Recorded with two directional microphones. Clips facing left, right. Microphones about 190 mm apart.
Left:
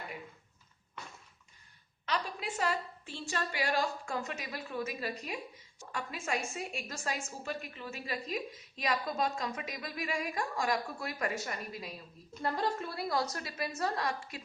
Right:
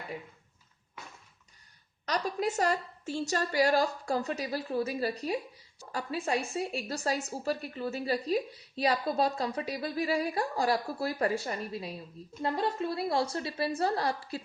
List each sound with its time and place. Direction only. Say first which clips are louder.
2.0 s a woman's voice: right 6 dB; 40° right (ahead or behind)